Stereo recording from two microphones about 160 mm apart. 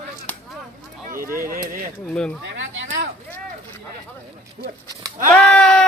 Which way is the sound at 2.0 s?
5° left (ahead or behind).